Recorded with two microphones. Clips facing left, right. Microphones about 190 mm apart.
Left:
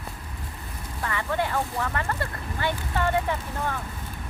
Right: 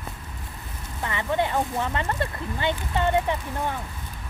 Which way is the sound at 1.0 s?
20° right (ahead or behind).